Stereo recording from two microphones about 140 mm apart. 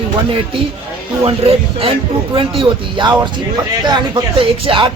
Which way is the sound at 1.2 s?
45° right (ahead or behind).